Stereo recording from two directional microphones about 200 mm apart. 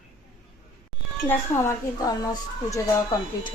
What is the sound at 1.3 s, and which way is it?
Speech, 15° left (ahead or behind).